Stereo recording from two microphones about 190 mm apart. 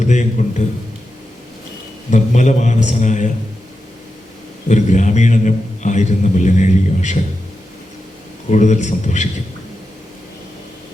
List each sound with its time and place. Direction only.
0.0 s a man's voice: 40° left (ahead or behind)
2.0 s a man's voice: 40° left (ahead or behind)
4.7 s a man's voice: 40° left (ahead or behind)
8.4 s a man's voice: 40° left (ahead or behind)